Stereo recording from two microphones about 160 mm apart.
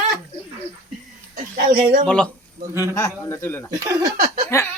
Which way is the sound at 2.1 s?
5° left (ahead or behind).